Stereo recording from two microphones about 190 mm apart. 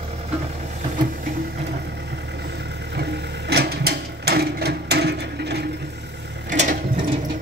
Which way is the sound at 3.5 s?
55° right (ahead or behind).